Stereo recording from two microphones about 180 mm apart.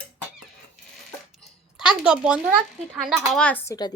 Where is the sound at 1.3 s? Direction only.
5° right (ahead or behind).